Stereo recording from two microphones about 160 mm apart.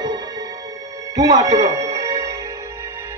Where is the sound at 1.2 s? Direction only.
20° right (ahead or behind).